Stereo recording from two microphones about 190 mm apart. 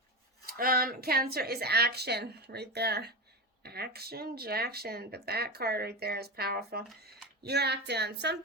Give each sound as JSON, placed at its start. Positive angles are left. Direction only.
{"t": 0.4, "sound": "speech", "side_deg": -50}